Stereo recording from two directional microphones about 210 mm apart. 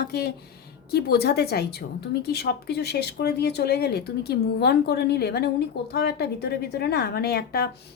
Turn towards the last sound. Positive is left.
turn(degrees=45)  # may be behind; listen again after turning